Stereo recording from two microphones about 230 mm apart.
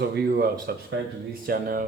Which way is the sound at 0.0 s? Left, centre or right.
Right.